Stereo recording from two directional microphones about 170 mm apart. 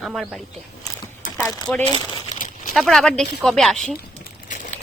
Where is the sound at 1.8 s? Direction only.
30° left (ahead or behind).